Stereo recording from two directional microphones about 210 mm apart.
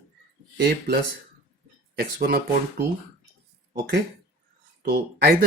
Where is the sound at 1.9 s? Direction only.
45° right (ahead or behind).